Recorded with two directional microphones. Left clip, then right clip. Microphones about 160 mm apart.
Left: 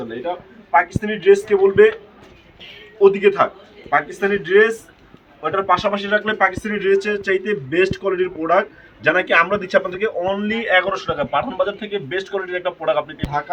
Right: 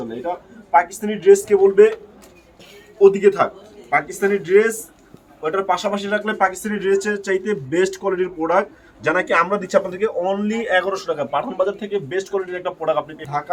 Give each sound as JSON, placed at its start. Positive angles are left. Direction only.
{"t": 0.2, "sound": "speech", "side_deg": -10}
{"t": 3.0, "sound": "a man's voice", "side_deg": -20}